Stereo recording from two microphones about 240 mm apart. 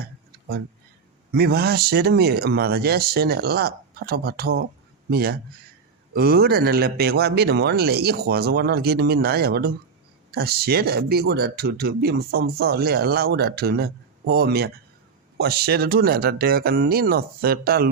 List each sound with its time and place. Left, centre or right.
1.3 s speech: right